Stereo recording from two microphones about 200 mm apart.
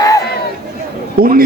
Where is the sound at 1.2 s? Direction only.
45° right (ahead or behind).